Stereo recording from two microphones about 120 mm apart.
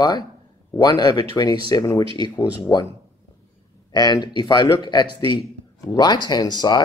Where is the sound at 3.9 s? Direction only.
35° left (ahead or behind).